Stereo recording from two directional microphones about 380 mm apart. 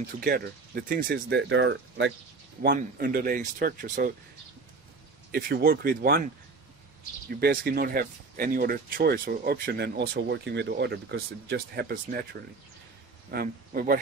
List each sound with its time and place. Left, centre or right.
0.3 s speech: right
5.3 s speech: right